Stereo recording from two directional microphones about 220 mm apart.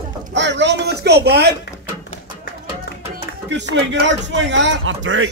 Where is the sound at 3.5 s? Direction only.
55° right (ahead or behind).